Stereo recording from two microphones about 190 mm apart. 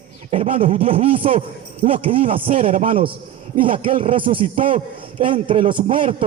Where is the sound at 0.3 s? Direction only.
35° right (ahead or behind).